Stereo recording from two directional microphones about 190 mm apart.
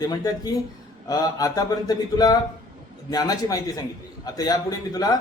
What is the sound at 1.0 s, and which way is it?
A man's voice, 20° left (ahead or behind).